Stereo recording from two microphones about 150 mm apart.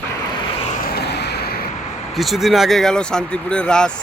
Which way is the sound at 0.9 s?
90° left.